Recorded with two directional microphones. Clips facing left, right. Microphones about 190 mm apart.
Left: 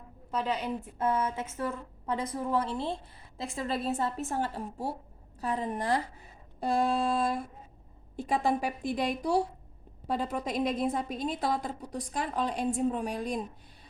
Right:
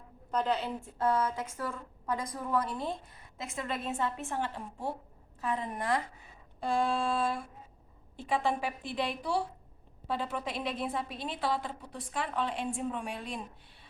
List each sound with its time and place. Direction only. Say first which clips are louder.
0.3 s a woman's voice: even; 10° left (ahead or behind); by 13.4 s 40° left (ahead or behind)